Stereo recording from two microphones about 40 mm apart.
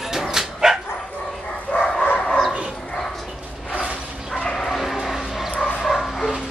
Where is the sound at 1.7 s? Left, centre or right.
Left.